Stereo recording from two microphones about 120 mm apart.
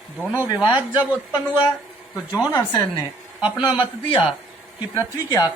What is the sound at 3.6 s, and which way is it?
Speech, 40° left (ahead or behind).